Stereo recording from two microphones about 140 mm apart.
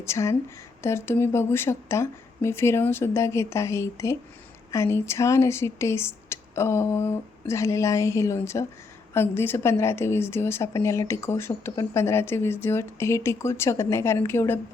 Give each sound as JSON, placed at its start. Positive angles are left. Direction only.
{"t": 0.0, "sound": "a woman's voice", "side_deg": 20}